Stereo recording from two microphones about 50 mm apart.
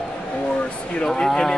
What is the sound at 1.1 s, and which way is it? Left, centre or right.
Speech, centre.